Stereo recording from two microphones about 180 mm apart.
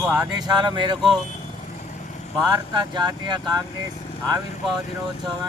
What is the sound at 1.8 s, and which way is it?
Vehicle, 40° left (ahead or behind).